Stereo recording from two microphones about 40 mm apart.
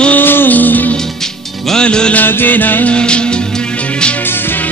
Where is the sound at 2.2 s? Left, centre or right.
Left.